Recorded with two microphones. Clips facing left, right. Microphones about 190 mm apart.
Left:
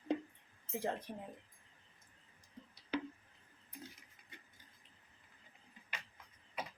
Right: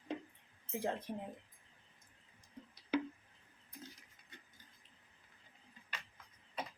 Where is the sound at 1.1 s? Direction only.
15° right (ahead or behind).